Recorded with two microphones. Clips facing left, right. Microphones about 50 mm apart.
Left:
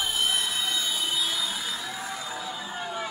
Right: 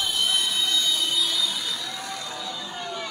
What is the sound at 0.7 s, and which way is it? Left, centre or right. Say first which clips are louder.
Train: right 4 dB; right.